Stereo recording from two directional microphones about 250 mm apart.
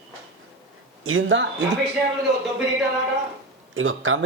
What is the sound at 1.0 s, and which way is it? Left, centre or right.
Speech, right.